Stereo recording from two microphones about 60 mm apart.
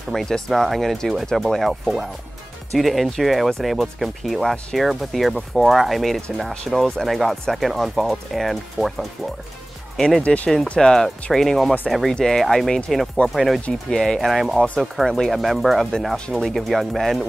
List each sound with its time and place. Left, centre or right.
0.1 s speech: centre
9.9 s speech: centre
10.2 s speech: left
10.7 s speech: centre